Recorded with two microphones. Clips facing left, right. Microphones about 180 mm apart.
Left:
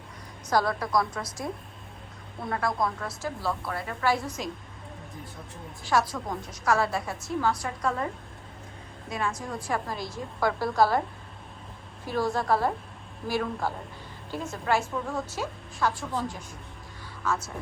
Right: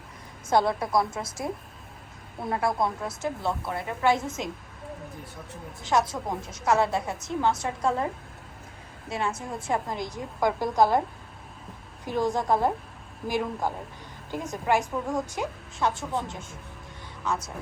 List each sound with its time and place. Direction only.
0.5 s a woman's voice: 25° right (ahead or behind)
5.8 s a woman's voice: 20° right (ahead or behind)
9.0 s a woman's voice: 25° right (ahead or behind)
12.0 s a woman's voice: 20° right (ahead or behind)